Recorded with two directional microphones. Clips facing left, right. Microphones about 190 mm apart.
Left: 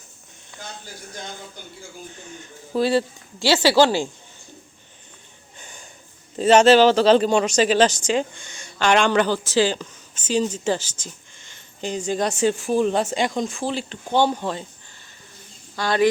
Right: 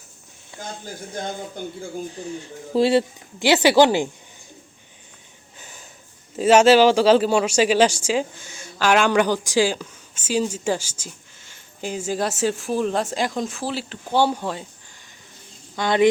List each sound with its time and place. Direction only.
0.9 s speech: 55° right (ahead or behind)
2.1 s speech: 30° right (ahead or behind)
5.5 s a sound: 5° right (ahead or behind)
6.3 s speech: 10° right (ahead or behind)
15.7 s speech: 20° right (ahead or behind)